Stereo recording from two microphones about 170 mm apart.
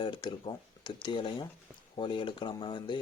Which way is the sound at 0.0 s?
25° left (ahead or behind).